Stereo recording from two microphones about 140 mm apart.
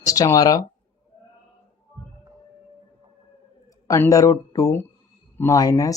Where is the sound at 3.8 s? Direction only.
20° left (ahead or behind).